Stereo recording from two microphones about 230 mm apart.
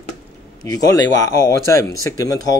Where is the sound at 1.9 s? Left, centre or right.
Centre.